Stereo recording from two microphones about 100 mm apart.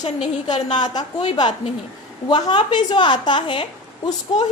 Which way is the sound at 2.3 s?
50° left (ahead or behind).